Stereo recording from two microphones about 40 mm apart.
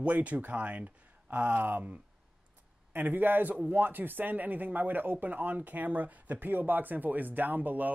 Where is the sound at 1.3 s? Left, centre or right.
Right.